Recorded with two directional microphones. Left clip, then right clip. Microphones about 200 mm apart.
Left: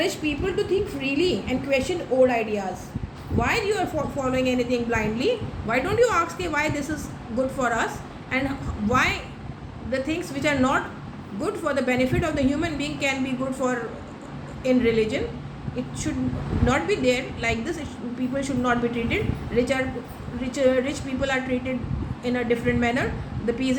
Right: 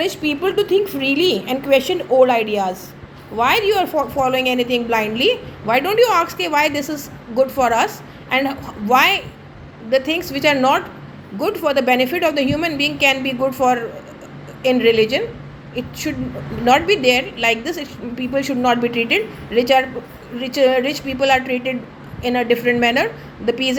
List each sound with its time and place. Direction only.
0.0 s a woman's voice: 40° right (ahead or behind)
1.0 s a woman's voice: 5° right (ahead or behind)
1.3 s a woman's voice: 45° right (ahead or behind)
8.9 s a woman's voice: 35° right (ahead or behind)